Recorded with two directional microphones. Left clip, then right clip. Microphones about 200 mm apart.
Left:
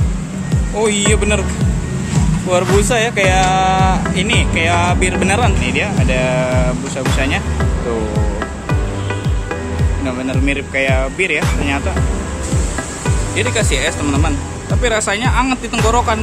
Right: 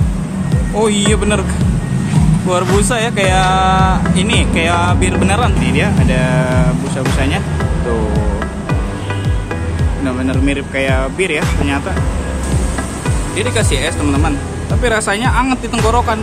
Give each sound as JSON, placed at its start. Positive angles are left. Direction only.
{"t": 0.7, "sound": "speech", "side_deg": 0}
{"t": 2.5, "sound": "music", "side_deg": 0}
{"t": 10.0, "sound": "music", "side_deg": 10}
{"t": 13.4, "sound": "music", "side_deg": 10}